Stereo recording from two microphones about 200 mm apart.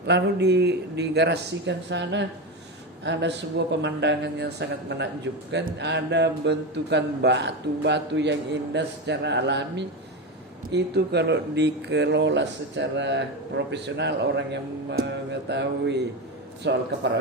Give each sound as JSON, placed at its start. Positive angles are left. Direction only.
{"t": 0.0, "sound": "a man's voice", "side_deg": -55}